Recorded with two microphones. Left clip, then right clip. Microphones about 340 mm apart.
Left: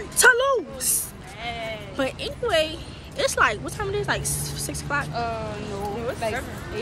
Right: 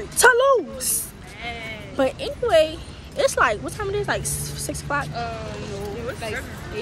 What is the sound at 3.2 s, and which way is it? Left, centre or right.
Speech, centre.